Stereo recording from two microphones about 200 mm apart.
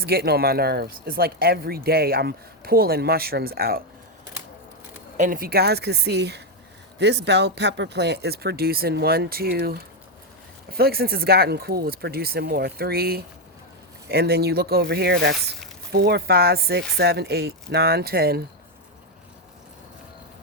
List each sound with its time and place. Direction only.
0.0 s speech: 50° right (ahead or behind)
5.1 s speech: 40° right (ahead or behind)